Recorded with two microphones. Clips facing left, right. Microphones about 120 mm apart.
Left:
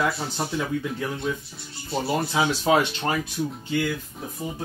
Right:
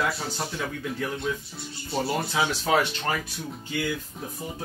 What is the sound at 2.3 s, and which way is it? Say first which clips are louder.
Speech: left 3 dB; 20° left (ahead or behind).